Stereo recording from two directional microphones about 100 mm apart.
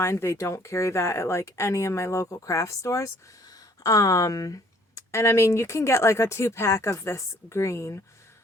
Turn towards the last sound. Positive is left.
turn(degrees=30)  # may be behind; listen again after turning